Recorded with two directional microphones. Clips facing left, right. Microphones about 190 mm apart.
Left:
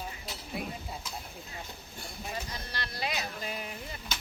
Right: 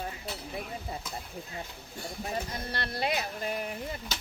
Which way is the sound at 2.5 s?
55° right (ahead or behind).